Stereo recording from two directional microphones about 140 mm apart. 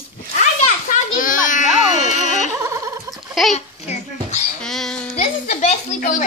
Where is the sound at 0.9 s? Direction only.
70° left (ahead or behind).